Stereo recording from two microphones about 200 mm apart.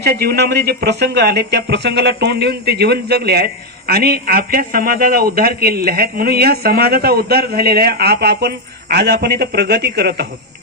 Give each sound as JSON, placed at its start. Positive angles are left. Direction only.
{"t": 0.2, "sound": "speech", "side_deg": -50}